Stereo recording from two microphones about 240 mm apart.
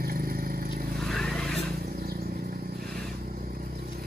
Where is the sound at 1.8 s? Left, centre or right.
Right.